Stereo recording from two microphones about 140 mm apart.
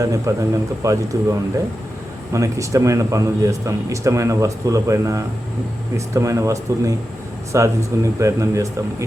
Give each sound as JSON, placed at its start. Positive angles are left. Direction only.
{"t": 0.0, "sound": "a man's voice", "side_deg": -25}